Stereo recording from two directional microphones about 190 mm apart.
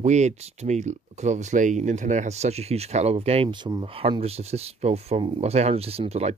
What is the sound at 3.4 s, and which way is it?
Speech, 20° right (ahead or behind).